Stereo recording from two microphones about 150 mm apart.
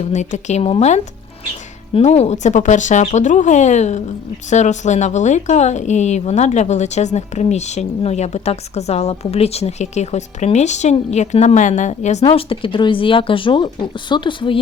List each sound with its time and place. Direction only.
0.0 s a woman's voice: 50° left (ahead or behind)
12.2 s speech: 35° left (ahead or behind)